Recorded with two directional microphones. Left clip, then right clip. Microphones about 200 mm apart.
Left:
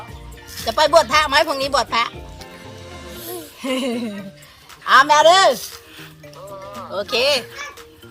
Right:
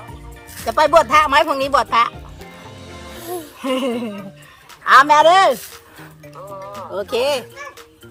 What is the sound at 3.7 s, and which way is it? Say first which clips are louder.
Speech: right 2 dB; 25° right (ahead or behind).